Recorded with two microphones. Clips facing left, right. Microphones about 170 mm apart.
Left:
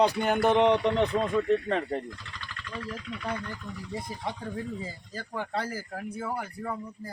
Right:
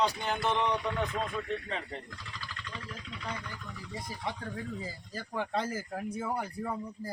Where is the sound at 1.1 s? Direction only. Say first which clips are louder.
Left 8 dB; 40° left (ahead or behind).